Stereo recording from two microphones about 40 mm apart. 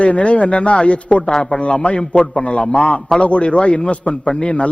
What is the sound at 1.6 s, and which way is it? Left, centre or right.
A man's voice, left.